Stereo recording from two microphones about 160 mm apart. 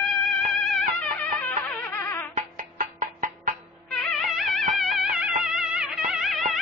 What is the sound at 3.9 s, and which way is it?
Music, centre (ahead or behind).